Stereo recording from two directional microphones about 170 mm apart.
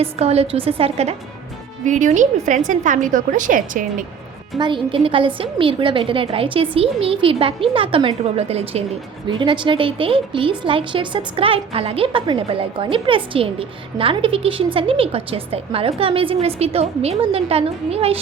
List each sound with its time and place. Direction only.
0.0 s a woman's voice: 35° right (ahead or behind)
4.5 s a woman's voice: 30° right (ahead or behind)